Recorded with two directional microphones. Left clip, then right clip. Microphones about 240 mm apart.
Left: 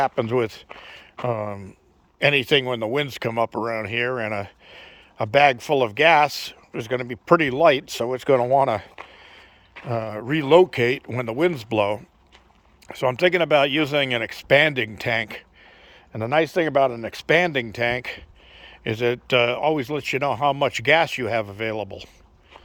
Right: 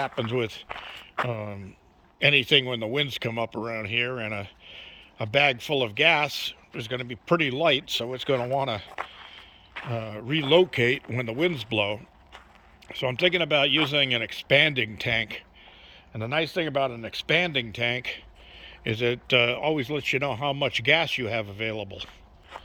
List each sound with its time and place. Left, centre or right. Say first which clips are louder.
0.0 s speech: left 6 dB; centre